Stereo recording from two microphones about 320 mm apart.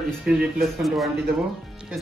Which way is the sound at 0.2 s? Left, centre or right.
Centre.